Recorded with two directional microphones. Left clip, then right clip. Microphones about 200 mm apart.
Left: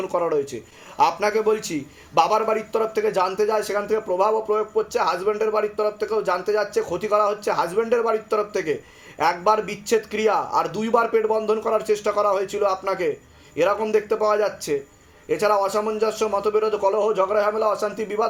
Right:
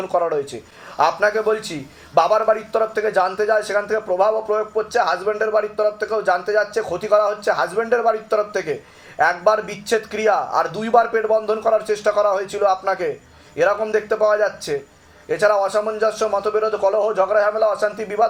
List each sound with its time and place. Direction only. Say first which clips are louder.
0.9 s speech: right 2 dB; 30° left (ahead or behind)